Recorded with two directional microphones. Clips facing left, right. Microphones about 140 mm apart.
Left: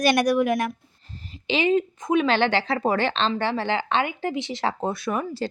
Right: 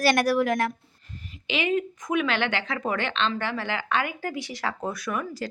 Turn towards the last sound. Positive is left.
turn(degrees=30)  # may be behind; listen again after turning